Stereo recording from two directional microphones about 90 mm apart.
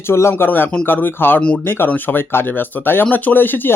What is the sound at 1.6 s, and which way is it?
Speech, 25° left (ahead or behind).